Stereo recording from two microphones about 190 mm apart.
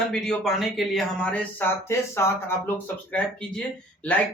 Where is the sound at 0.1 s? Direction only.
Centre (ahead or behind).